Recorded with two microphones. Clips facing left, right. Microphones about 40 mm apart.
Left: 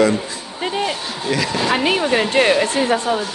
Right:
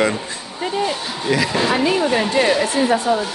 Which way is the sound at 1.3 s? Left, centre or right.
Centre.